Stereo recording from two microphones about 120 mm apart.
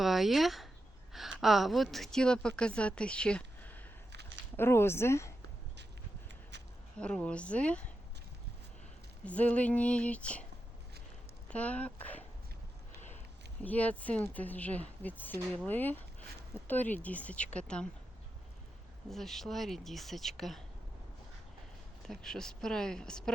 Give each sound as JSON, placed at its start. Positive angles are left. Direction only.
{"t": 0.0, "sound": "a woman's voice", "side_deg": 0}
{"t": 7.0, "sound": "speech", "side_deg": 10}
{"t": 9.2, "sound": "speech", "side_deg": 10}
{"t": 11.4, "sound": "speech", "side_deg": 10}
{"t": 13.6, "sound": "speech", "side_deg": 10}
{"t": 19.1, "sound": "speech", "side_deg": 0}
{"t": 22.0, "sound": "speech", "side_deg": 5}